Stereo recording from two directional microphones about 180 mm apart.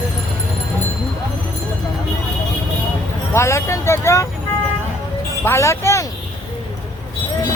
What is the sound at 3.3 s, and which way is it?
Speech, 15° left (ahead or behind).